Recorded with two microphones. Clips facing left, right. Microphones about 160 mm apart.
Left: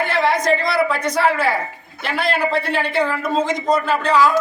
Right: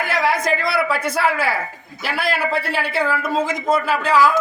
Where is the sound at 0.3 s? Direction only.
5° right (ahead or behind).